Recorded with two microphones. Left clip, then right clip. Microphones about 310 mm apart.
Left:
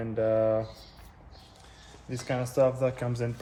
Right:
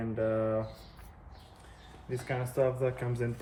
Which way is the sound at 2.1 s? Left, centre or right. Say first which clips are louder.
Left 4 dB; left.